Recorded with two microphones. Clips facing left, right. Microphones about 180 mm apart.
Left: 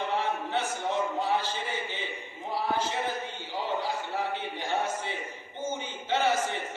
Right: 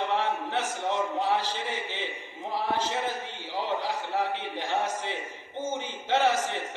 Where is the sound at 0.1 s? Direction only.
90° right.